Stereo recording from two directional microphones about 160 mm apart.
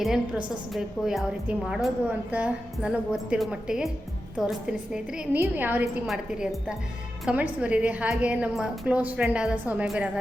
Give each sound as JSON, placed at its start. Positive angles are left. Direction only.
{"t": 0.0, "sound": "a woman's voice", "side_deg": 0}